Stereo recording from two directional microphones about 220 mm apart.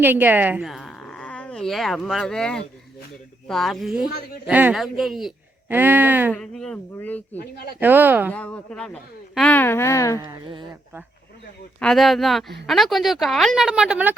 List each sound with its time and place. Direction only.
0.0 s a woman's voice: 10° right (ahead or behind)
6.3 s a woman's voice: 5° left (ahead or behind)
7.8 s speech: 10° right (ahead or behind)
8.3 s speech: 5° left (ahead or behind)
10.2 s speech: 20° right (ahead or behind)
11.8 s a woman's voice: centre (ahead or behind)